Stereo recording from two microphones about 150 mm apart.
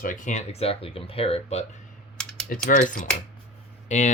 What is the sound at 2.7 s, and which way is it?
Speech, 60° left (ahead or behind).